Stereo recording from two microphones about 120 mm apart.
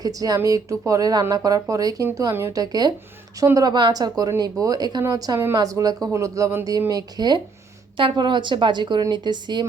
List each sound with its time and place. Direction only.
0.0 s a woman's voice: 30° right (ahead or behind)